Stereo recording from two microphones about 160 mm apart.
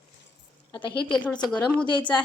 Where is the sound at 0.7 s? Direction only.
30° left (ahead or behind).